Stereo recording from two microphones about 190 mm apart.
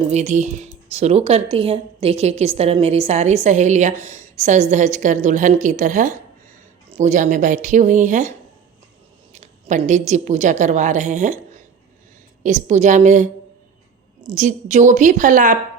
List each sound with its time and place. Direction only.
0.1 s speech: 35° right (ahead or behind)
9.3 s a sound: 40° right (ahead or behind)
10.1 s speech: 40° right (ahead or behind)
14.3 s speech: 40° right (ahead or behind)